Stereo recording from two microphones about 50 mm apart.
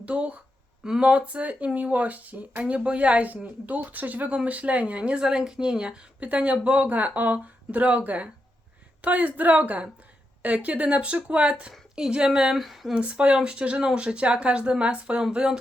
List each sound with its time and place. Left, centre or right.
0.0 s a woman's voice: right
12.5 s speech: centre
12.9 s a woman's voice: right